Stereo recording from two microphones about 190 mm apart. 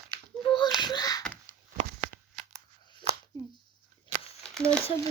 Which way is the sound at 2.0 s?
50° right (ahead or behind).